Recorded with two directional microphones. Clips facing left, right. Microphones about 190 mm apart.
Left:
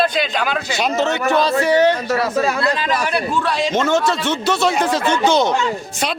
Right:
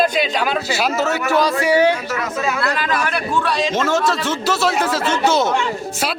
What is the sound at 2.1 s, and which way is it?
Speech, 35° left (ahead or behind).